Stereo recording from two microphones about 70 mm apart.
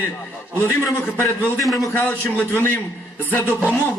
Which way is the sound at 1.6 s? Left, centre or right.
Centre.